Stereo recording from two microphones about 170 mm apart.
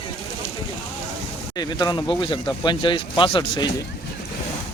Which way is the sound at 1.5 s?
25° left (ahead or behind).